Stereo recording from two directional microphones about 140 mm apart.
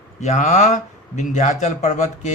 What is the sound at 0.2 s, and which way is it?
A man's voice, 55° left (ahead or behind).